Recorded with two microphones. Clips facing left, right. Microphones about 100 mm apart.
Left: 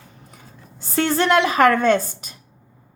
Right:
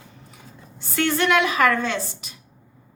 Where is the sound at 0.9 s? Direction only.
35° left (ahead or behind).